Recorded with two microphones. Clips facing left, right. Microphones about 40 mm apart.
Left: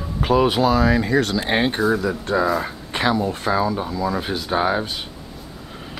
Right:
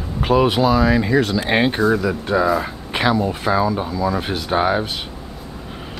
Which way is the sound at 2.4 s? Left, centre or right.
Centre.